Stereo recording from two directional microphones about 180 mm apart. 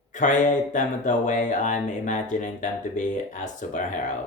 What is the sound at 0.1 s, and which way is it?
Speech, 45° left (ahead or behind).